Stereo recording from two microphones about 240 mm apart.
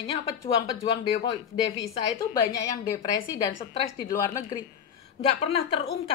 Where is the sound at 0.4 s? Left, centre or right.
Centre.